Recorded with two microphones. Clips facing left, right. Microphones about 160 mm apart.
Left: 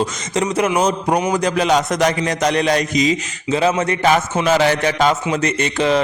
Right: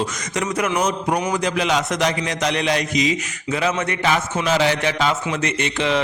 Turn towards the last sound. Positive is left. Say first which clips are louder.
# left 4 dB
turn(degrees=40)  # may be behind; listen again after turning